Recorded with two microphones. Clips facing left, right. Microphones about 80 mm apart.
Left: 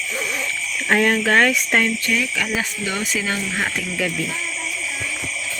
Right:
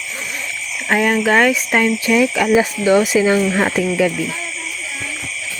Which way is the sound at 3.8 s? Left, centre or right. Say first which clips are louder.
Right 7 dB; centre.